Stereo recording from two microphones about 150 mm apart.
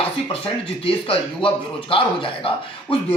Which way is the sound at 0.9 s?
40° left (ahead or behind).